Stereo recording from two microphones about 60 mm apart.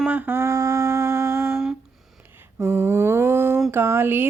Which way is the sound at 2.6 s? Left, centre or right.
Right.